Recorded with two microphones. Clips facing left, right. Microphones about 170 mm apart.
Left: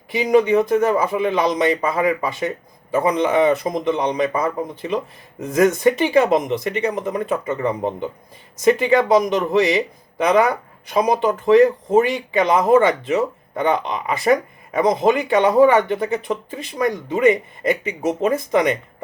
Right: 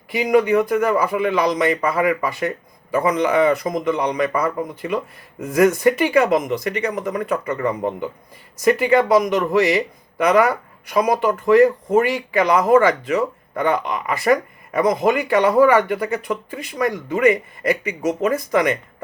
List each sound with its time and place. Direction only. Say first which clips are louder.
0.1 s speech: left 1 dB; 25° left (ahead or behind)